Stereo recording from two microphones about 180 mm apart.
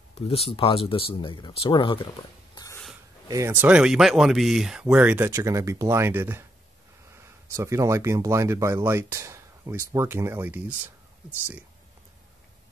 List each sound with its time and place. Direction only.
0.1 s speech: 35° left (ahead or behind)
2.5 s snort: 20° left (ahead or behind)
3.3 s speech: 15° right (ahead or behind)